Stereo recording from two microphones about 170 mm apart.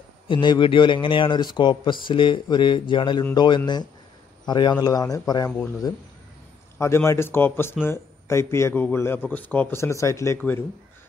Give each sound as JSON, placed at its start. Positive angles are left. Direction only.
{"t": 0.3, "sound": "a man's voice", "side_deg": 30}
{"t": 6.8, "sound": "a man's voice", "side_deg": 15}